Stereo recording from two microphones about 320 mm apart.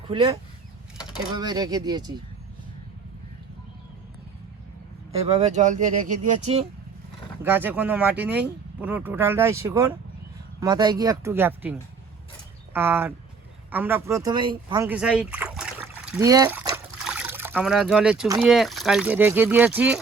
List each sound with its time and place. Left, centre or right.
0.1 s speech: centre
5.1 s speech: centre
7.4 s speech: centre
12.7 s speech: centre